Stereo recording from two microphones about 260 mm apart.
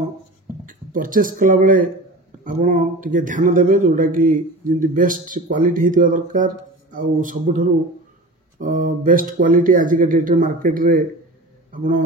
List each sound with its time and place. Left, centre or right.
0.7 s speech: right
8.5 s speech: right